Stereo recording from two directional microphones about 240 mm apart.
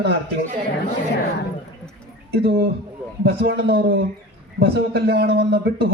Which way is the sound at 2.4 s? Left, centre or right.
Right.